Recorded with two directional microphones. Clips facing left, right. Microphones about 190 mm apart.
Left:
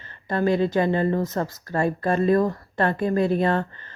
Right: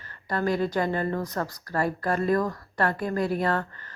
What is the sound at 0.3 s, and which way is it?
Speech, 20° left (ahead or behind).